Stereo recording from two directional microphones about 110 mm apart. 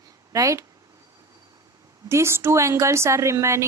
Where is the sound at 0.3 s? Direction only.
30° right (ahead or behind).